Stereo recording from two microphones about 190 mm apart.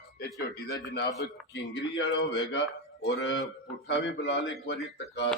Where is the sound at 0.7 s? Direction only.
60° left (ahead or behind).